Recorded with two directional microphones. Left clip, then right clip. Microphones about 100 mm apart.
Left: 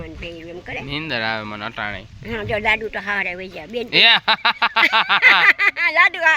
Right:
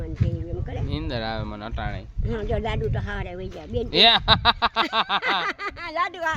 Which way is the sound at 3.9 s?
15° left (ahead or behind).